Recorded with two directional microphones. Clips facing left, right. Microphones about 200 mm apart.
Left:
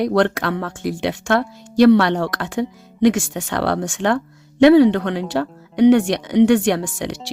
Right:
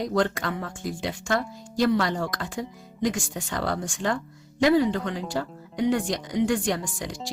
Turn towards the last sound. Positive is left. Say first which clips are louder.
# left 8 dB
turn(degrees=75)  # may be behind; listen again after turning